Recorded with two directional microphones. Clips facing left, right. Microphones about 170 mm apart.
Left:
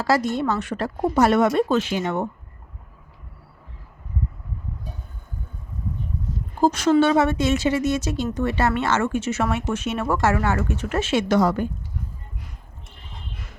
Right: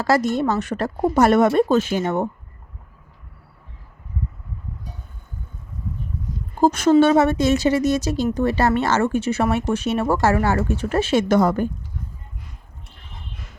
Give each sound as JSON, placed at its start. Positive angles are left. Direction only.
{"t": 0.0, "sound": "a woman's voice", "side_deg": -45}
{"t": 6.6, "sound": "a woman's voice", "side_deg": -50}